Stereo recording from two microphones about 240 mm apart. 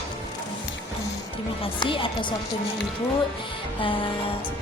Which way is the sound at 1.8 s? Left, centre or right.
Left.